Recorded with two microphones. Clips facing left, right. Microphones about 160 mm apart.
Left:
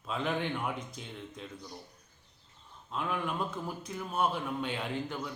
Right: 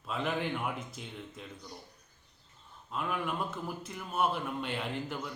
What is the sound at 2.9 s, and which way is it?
A man's voice, 5° right (ahead or behind).